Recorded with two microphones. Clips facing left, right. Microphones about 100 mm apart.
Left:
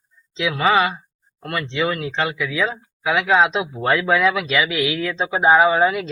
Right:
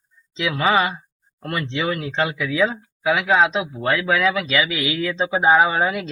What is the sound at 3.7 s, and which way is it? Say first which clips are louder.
Speech: left 2 dB; 25° left (ahead or behind).